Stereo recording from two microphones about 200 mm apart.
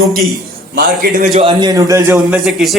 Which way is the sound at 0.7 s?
45° right (ahead or behind).